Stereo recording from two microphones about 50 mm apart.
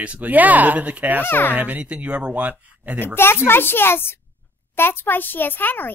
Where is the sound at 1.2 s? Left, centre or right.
Left.